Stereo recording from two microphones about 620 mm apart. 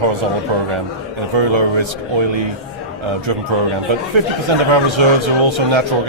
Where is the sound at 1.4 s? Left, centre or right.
Right.